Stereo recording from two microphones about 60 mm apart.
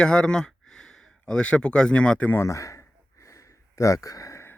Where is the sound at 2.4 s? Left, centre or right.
Left.